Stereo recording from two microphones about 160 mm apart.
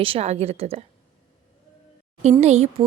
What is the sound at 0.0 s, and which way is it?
Speech, 35° right (ahead or behind).